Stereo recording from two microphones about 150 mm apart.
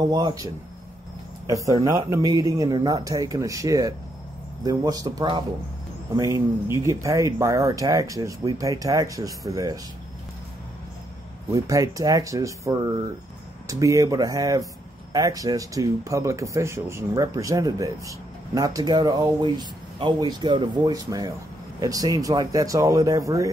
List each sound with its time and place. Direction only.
0.1 s speech: 25° right (ahead or behind)
1.5 s speech: 25° right (ahead or behind)
11.5 s speech: 20° right (ahead or behind)